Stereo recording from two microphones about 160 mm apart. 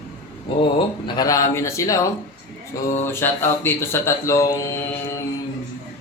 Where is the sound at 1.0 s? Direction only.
25° left (ahead or behind).